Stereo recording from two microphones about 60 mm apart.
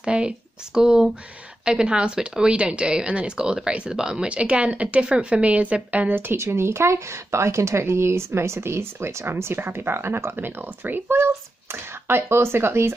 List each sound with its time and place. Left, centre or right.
0.0 s speech: centre
6.1 s speech: right